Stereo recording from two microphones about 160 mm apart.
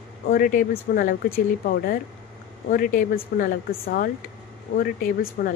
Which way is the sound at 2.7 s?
60° left (ahead or behind).